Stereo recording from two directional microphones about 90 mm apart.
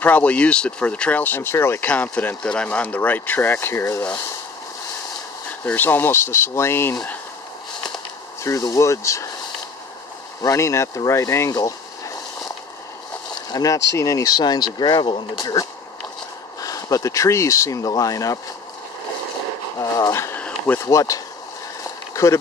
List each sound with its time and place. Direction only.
0.0 s speech: 15° left (ahead or behind)
5.5 s speech: 20° left (ahead or behind)
8.5 s speech: 35° left (ahead or behind)
10.4 s speech: 35° left (ahead or behind)
13.5 s speech: 40° left (ahead or behind); by 15.2 s 60° left (ahead or behind)
15.3 s speech: 45° left (ahead or behind)
16.6 s speech: 40° left (ahead or behind)
19.8 s a sound: 35° left (ahead or behind)
20.3 s a sound: 15° left (ahead or behind)
20.8 s speech: 35° left (ahead or behind)
22.1 s a sound: 35° left (ahead or behind)